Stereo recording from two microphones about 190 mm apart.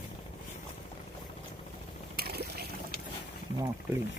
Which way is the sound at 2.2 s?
55° right (ahead or behind).